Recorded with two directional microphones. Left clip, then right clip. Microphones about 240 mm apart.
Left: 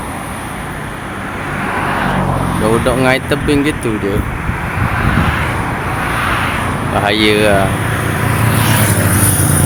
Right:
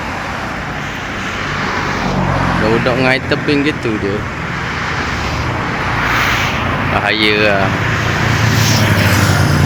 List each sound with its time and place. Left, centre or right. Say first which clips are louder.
2.6 s speech: left 2 dB; centre
7.0 s speech: left 2 dB; centre
9.2 s vehicle: right 2 dB; right